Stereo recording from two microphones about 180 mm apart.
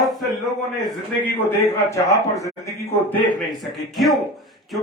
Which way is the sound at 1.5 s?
15° left (ahead or behind).